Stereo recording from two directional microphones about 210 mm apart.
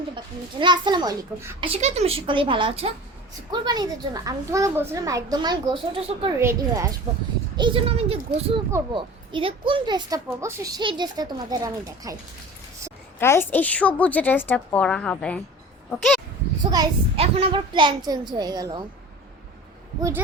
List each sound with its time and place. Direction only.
0.6 s a child's voice: 20° right (ahead or behind)
1.6 s a child's voice: 30° right (ahead or behind)
6.4 s a woman's voice: 15° right (ahead or behind)
13.1 s a woman's voice: 10° left (ahead or behind)
16.7 s a child's voice: 25° right (ahead or behind)
20.0 s a woman's voice: 15° right (ahead or behind)